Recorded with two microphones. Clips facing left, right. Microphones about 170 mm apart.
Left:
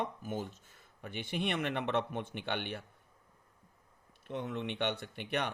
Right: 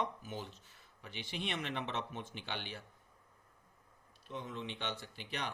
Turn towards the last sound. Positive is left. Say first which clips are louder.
# left 7 dB
turn(degrees=60)  # may be behind; listen again after turning